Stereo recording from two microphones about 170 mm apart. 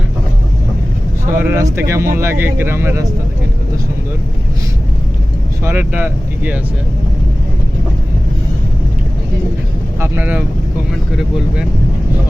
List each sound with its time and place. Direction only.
1.4 s speech: 10° right (ahead or behind)
5.6 s speech: 10° right (ahead or behind)
10.0 s speech: 10° right (ahead or behind)